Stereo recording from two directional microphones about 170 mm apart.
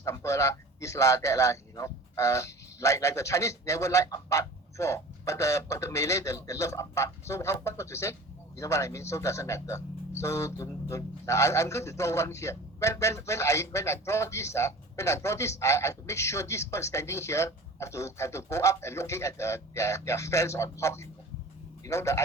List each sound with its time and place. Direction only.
0.0 s a man's voice: 15° left (ahead or behind)